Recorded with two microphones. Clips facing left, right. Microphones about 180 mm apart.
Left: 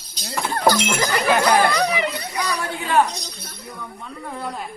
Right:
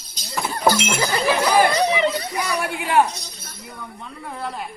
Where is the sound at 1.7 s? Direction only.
25° right (ahead or behind).